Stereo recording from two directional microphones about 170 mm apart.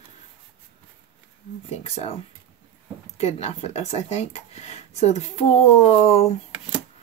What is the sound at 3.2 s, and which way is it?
Speech, 40° left (ahead or behind).